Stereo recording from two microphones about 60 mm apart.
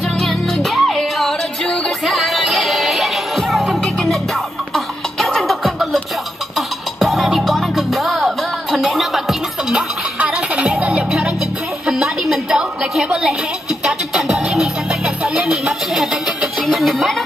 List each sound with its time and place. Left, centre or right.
0.2 s music: centre
7.0 s music: centre
10.1 s music: right
11.8 s a sound: centre
13.8 s music: centre
15.2 s a sound: centre
16.6 s speech: centre